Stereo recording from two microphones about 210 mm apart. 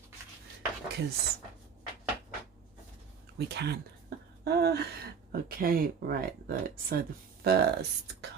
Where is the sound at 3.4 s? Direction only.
55° right (ahead or behind).